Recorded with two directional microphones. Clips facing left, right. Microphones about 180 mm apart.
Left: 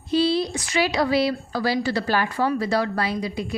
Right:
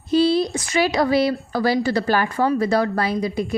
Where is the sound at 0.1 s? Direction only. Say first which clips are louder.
Right 4 dB; 45° right (ahead or behind).